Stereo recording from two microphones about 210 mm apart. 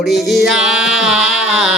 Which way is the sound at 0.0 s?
Centre (ahead or behind).